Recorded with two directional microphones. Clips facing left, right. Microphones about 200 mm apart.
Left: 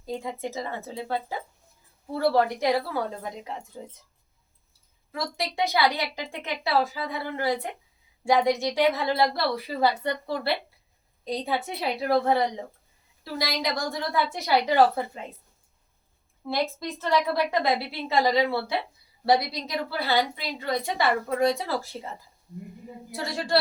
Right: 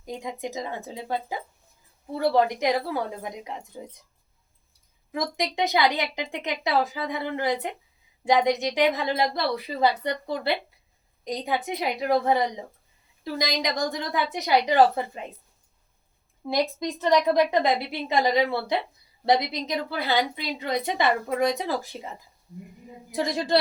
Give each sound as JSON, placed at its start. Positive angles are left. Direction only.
{"t": 0.0, "sound": "a woman's voice", "side_deg": -15}
{"t": 5.1, "sound": "a woman's voice", "side_deg": -20}
{"t": 16.5, "sound": "a woman's voice", "side_deg": -15}
{"t": 23.1, "sound": "a woman's voice", "side_deg": -15}